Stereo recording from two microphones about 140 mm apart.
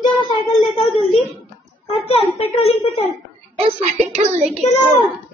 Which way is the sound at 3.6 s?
50° right (ahead or behind).